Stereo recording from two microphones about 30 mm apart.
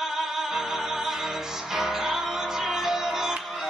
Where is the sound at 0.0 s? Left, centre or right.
Centre.